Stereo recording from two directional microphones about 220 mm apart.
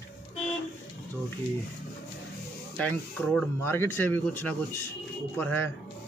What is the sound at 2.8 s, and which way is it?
Speech, 5° left (ahead or behind).